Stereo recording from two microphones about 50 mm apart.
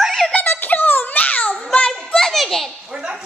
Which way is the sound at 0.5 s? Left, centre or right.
Left.